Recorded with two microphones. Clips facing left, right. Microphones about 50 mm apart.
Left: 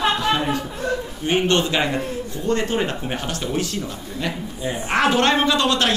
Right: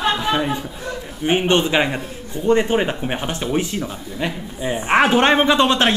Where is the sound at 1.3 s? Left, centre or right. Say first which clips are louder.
Right 2 dB; centre.